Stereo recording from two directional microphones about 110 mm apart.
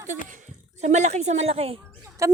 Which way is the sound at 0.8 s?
90° right.